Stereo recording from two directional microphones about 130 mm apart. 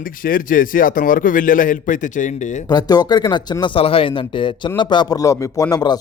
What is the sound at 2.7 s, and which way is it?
A man's voice, 30° left (ahead or behind).